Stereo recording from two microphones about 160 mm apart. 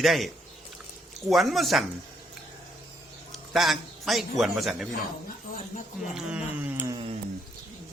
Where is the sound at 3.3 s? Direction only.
Centre (ahead or behind).